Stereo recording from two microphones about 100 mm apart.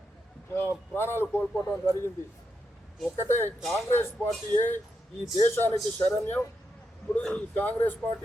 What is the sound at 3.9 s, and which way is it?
Speech, 25° left (ahead or behind).